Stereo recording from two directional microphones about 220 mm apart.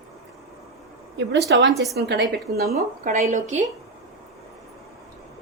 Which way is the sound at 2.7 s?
35° right (ahead or behind).